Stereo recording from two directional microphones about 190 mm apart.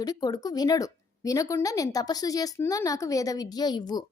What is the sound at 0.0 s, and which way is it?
Speech, 20° left (ahead or behind).